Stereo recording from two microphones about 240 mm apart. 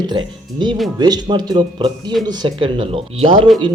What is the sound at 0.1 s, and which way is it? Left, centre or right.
Speech, centre.